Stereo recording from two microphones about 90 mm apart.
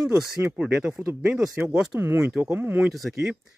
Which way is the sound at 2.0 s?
25° right (ahead or behind).